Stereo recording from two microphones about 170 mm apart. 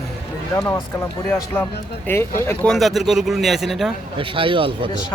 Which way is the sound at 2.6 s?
Centre (ahead or behind).